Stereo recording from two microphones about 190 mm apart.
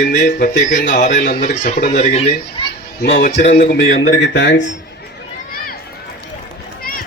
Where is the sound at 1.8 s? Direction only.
55° left (ahead or behind).